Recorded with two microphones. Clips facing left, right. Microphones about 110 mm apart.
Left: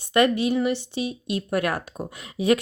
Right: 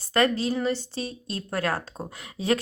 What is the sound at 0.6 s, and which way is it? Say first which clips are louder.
Speech: left 3 dB; 15° left (ahead or behind).